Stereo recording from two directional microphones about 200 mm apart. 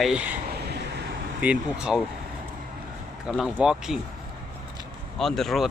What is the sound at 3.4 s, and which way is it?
Speech, 5° right (ahead or behind).